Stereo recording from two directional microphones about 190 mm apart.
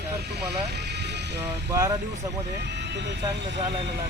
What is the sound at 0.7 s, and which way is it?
Vehicle, 60° right (ahead or behind).